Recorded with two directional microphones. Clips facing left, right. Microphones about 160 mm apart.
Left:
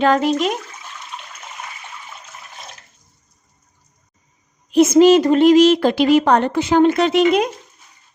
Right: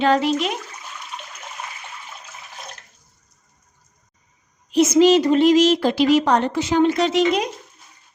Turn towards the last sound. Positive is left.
turn(degrees=55)  # may be behind; listen again after turning